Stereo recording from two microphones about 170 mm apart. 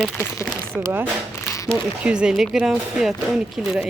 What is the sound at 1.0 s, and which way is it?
Zipper, 15° left (ahead or behind).